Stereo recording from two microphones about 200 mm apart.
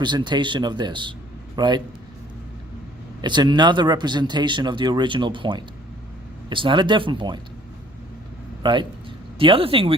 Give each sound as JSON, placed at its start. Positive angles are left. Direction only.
{"t": 0.0, "sound": "speech", "side_deg": -20}
{"t": 3.2, "sound": "speech", "side_deg": -20}
{"t": 8.6, "sound": "speech", "side_deg": -25}